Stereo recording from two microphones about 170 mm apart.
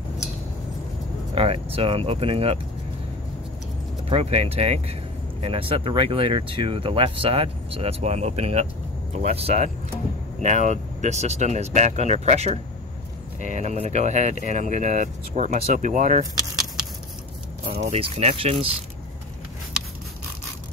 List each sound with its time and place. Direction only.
1.3 s speech: 35° right (ahead or behind)
4.1 s speech: 35° right (ahead or behind)
17.7 s speech: 40° right (ahead or behind)